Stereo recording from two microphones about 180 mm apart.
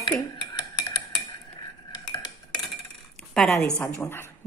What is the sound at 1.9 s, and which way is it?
Stir, 20° left (ahead or behind).